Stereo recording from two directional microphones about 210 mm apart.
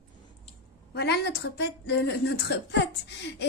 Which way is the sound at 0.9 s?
50° left (ahead or behind).